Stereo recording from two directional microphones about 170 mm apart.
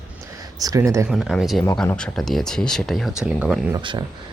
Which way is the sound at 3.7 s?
25° right (ahead or behind).